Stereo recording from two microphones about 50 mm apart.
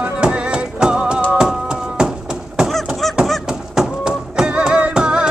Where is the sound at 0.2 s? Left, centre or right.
Right.